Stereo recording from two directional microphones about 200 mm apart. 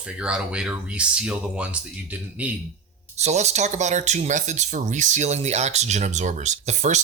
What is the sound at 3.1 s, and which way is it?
Speech, 35° right (ahead or behind).